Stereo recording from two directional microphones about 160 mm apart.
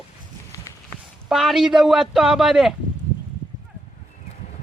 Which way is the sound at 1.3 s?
Centre (ahead or behind).